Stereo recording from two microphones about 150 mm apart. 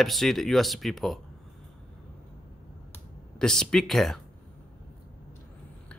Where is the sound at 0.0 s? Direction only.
Centre (ahead or behind).